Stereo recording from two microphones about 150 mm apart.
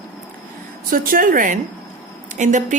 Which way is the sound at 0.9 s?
65° right (ahead or behind).